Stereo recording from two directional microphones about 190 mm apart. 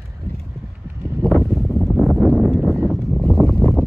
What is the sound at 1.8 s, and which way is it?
Wind noise, centre (ahead or behind).